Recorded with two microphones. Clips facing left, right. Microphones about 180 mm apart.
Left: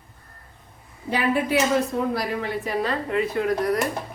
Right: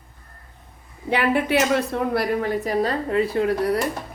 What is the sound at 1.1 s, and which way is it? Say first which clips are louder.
A man's voice: right 2 dB; 65° right (ahead or behind).